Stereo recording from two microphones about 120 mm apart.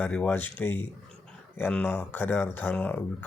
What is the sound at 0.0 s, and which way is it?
Speech, 10° left (ahead or behind).